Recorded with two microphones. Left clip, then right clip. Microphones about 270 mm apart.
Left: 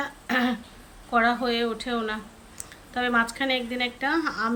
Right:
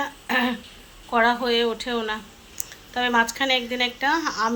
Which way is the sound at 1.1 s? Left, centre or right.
Centre.